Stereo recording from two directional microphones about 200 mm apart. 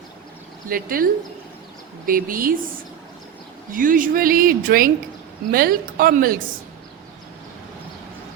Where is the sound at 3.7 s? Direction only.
45° right (ahead or behind).